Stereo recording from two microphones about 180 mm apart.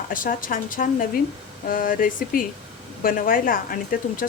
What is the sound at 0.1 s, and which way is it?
A woman's voice, 50° left (ahead or behind).